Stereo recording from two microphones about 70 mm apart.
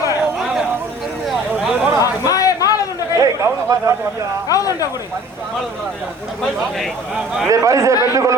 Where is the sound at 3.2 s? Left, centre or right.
Right.